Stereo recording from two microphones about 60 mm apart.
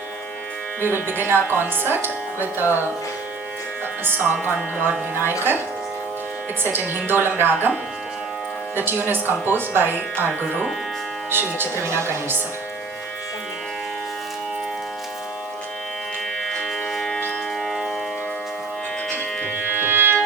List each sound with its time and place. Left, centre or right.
0.8 s speech: right
4.0 s speech: right
6.6 s speech: right
8.7 s speech: right
11.3 s a woman's voice: right
16.4 s music: centre
19.8 s music: right